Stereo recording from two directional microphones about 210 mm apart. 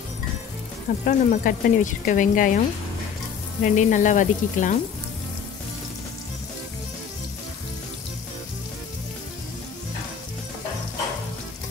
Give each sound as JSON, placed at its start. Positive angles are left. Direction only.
{"t": 1.0, "sound": "speech", "side_deg": 40}
{"t": 3.6, "sound": "speech", "side_deg": 35}